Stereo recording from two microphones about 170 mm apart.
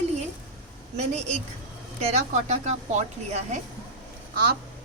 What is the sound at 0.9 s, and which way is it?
A woman's voice, 40° right (ahead or behind).